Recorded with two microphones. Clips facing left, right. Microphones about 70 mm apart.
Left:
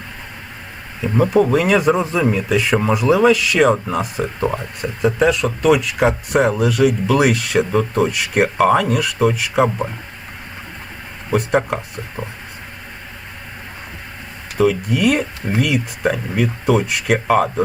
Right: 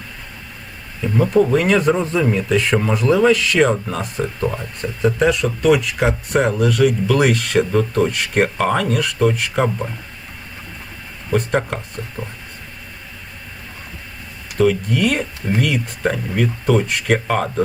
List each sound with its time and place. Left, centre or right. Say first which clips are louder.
1.2 s speech: even; centre
4.4 s speech: left 3 dB; left
4.8 s speech: even; centre
11.3 s speech: left 2 dB; centre
14.6 s speech: left 1 dB; centre